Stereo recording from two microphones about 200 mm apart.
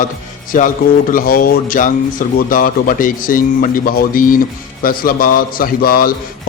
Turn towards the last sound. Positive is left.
turn(degrees=45)  # may be behind; listen again after turning